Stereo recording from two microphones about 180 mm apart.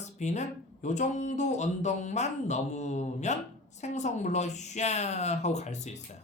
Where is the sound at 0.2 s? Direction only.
40° left (ahead or behind).